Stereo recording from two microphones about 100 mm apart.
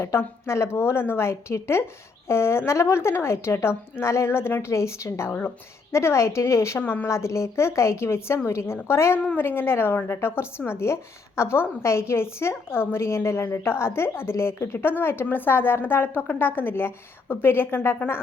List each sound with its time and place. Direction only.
0.0 s a woman's voice: 25° left (ahead or behind)